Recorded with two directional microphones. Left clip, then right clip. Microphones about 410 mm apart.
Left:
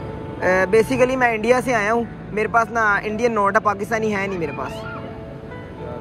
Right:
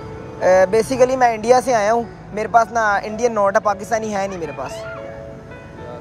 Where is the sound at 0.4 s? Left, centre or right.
Centre.